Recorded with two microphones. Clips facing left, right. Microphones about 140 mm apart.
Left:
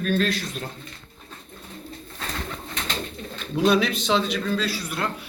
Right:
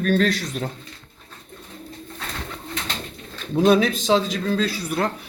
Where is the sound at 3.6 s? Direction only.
45° right (ahead or behind).